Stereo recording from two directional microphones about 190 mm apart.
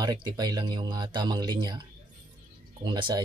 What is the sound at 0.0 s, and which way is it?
Speech, 20° right (ahead or behind).